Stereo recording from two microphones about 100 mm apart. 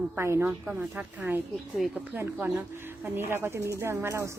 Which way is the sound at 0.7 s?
10° right (ahead or behind).